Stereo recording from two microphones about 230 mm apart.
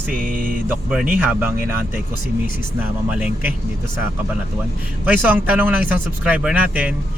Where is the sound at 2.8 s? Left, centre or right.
Centre.